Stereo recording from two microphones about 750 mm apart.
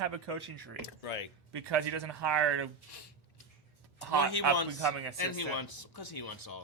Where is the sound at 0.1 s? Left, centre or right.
Right.